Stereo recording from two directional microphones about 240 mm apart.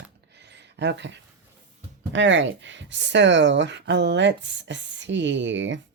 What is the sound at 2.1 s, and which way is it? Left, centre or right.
Speech, right.